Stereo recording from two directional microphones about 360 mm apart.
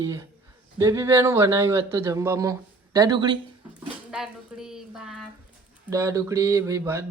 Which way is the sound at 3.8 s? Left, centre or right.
Centre.